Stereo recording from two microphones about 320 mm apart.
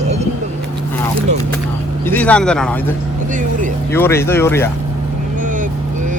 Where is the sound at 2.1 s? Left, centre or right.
Centre.